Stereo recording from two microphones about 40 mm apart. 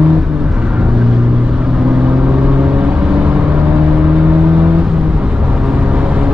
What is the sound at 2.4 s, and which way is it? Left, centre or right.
Vehicle, right.